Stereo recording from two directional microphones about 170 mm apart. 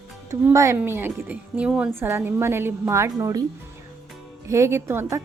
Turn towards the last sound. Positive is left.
turn(degrees=-15)  # may be behind; listen again after turning